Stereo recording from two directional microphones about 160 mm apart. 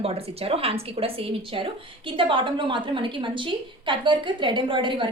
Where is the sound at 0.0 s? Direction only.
40° right (ahead or behind).